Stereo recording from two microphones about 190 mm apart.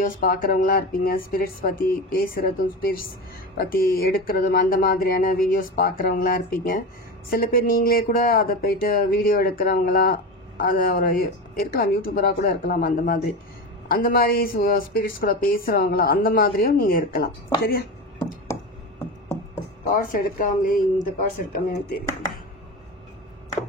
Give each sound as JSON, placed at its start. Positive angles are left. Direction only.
{"t": 0.0, "sound": "a woman's voice", "side_deg": 50}
{"t": 19.8, "sound": "a woman's voice", "side_deg": 45}